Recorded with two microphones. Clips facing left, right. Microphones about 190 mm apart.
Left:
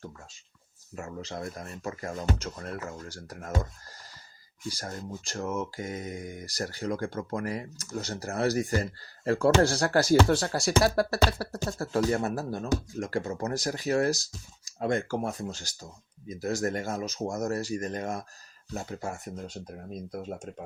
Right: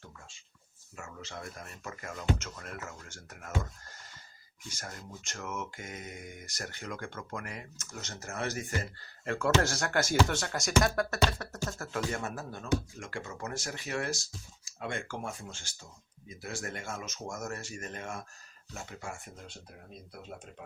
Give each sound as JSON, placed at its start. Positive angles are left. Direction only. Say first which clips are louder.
{"t": 0.9, "sound": "speech", "louder": "left 7 dB", "side_deg": 35}
{"t": 4.7, "sound": "speech", "louder": "left 7 dB", "side_deg": 35}